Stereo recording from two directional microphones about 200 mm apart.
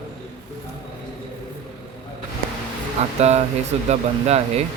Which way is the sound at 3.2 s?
35° right (ahead or behind).